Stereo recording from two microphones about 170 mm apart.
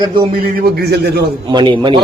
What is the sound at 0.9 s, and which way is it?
Speech, 70° right (ahead or behind).